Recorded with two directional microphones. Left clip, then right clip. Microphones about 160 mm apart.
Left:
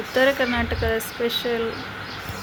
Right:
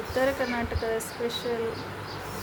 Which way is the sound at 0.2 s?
20° left (ahead or behind).